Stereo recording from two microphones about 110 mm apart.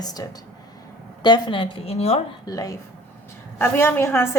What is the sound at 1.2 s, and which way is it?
A woman's voice, 45° left (ahead or behind).